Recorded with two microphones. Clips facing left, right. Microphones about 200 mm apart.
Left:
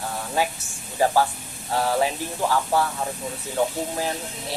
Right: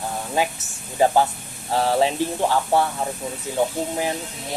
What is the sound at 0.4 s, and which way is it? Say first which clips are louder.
Speech: right 1 dB; 15° right (ahead or behind).